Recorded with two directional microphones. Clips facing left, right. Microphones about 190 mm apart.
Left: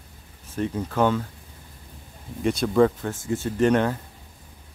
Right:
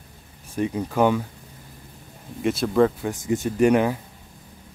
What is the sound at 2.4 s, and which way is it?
Speech, centre (ahead or behind).